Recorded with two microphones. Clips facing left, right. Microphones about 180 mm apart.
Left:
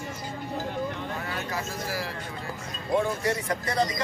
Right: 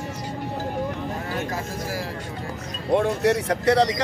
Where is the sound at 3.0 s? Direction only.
70° right (ahead or behind).